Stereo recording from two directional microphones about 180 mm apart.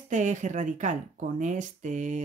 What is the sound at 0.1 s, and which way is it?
A woman's voice, 45° right (ahead or behind).